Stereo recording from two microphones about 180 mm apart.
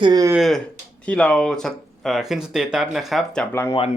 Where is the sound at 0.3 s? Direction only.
Centre (ahead or behind).